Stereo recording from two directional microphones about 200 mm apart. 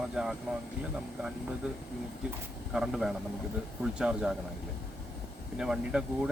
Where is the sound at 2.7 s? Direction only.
Centre (ahead or behind).